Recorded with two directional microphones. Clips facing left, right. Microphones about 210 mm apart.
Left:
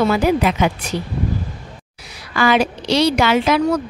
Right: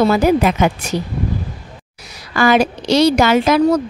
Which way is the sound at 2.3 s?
45° right (ahead or behind).